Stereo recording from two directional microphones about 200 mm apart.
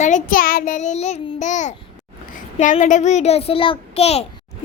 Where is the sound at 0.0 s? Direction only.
40° left (ahead or behind).